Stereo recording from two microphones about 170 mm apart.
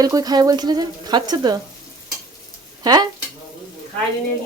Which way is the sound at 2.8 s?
25° right (ahead or behind).